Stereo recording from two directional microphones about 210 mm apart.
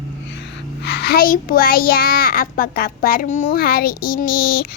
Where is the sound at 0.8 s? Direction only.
50° left (ahead or behind).